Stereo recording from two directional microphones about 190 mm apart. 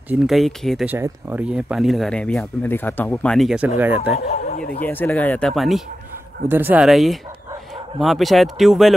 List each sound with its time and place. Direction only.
0.1 s speech: centre (ahead or behind)
0.9 s speech: 10° right (ahead or behind)
4.1 s speech: 35° left (ahead or behind)
4.6 s speech: 50° left (ahead or behind)
4.8 s speech: 10° left (ahead or behind)